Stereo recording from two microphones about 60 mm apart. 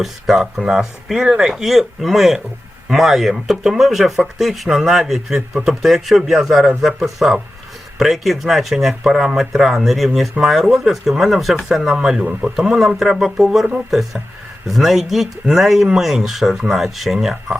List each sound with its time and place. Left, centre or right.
0.0 s speech: centre
12.2 s speech: centre
12.5 s speech: centre